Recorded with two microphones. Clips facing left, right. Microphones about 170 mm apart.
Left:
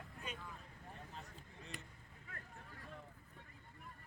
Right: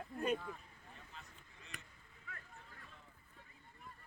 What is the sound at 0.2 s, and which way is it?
Speech, 55° right (ahead or behind).